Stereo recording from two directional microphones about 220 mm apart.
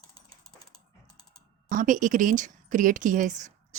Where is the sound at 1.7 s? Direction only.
35° right (ahead or behind).